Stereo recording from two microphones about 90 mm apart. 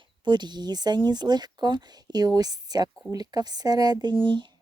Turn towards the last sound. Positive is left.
turn(degrees=-60)  # may be behind; listen again after turning